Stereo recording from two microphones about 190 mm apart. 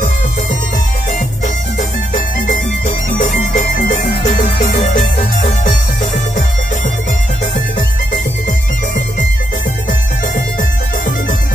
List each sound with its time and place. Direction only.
1.8 s music: 40° left (ahead or behind)